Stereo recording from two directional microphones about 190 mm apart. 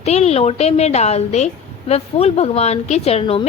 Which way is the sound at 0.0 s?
35° left (ahead or behind).